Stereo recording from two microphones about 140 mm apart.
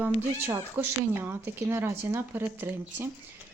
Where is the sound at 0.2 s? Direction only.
15° right (ahead or behind).